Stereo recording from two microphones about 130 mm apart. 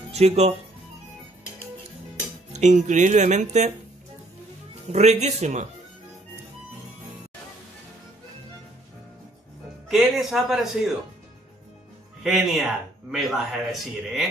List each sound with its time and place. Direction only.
0.1 s speech: 55° right (ahead or behind)
2.5 s speech: 65° right (ahead or behind)
4.8 s speech: 60° right (ahead or behind)
9.8 s a man's voice: centre (ahead or behind)
12.2 s a man's voice: centre (ahead or behind)